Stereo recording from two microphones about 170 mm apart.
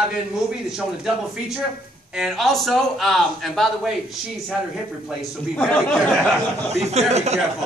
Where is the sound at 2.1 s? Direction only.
Centre (ahead or behind).